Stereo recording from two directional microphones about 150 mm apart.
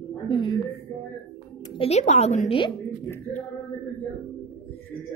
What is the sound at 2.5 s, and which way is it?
Speech, 30° left (ahead or behind).